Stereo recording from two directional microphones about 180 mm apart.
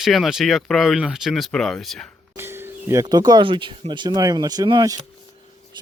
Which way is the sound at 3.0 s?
20° right (ahead or behind).